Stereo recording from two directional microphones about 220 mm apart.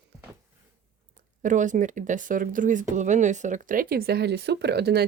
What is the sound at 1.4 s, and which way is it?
Speech, 35° right (ahead or behind).